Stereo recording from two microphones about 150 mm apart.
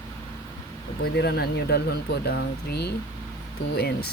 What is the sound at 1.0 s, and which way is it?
Speech, 90° left.